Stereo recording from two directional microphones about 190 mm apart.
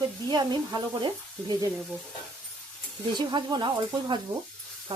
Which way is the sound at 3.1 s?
25° right (ahead or behind).